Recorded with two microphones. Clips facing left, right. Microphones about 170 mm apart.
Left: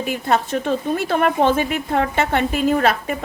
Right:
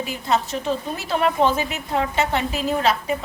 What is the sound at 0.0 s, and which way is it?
A woman's voice, 55° left (ahead or behind).